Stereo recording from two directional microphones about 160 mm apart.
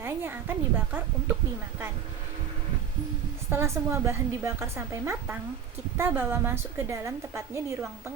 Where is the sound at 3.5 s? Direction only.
15° right (ahead or behind).